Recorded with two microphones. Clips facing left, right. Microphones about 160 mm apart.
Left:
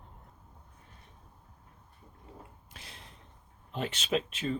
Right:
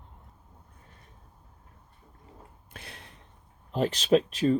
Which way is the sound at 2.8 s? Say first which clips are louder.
Right 5 dB; 65° right (ahead or behind).